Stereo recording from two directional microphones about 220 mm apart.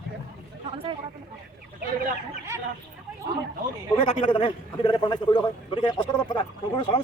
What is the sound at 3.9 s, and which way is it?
A man's voice, 25° left (ahead or behind).